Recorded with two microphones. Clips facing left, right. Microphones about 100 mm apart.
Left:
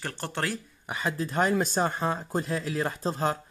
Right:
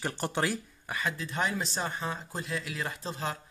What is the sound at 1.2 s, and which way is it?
Speech, 45° left (ahead or behind).